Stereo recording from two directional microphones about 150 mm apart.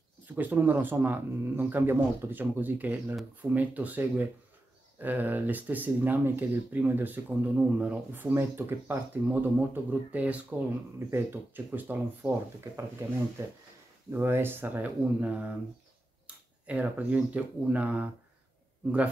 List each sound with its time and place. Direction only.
0.3 s speech: 10° right (ahead or behind)